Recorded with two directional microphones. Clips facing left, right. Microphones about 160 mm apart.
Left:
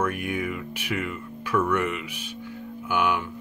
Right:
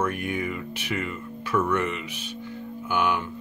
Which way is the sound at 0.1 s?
10° left (ahead or behind).